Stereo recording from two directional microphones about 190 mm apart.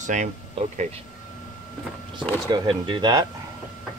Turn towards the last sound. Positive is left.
turn(degrees=-20)  # may be behind; listen again after turning